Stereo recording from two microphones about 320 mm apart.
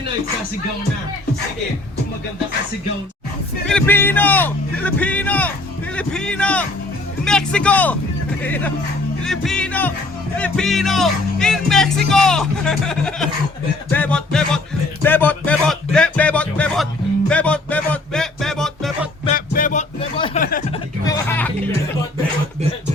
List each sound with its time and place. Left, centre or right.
3.7 s speech: centre
15.0 s music: centre
19.2 s a sound: left
21.0 s music: centre